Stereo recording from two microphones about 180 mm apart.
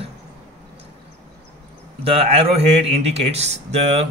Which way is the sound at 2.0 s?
35° right (ahead or behind).